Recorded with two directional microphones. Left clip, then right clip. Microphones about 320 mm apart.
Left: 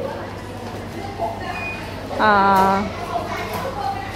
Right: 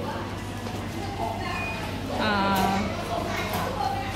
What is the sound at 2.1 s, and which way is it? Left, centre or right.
Speech, centre.